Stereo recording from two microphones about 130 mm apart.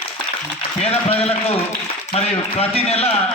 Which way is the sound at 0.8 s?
50° left (ahead or behind).